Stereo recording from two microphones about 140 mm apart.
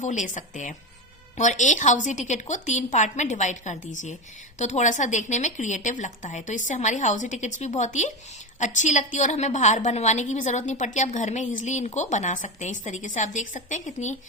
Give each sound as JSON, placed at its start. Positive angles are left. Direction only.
{"t": 0.0, "sound": "a woman's voice", "side_deg": 60}